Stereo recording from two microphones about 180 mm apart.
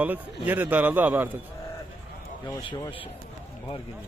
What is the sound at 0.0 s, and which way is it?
A man's voice, 10° right (ahead or behind).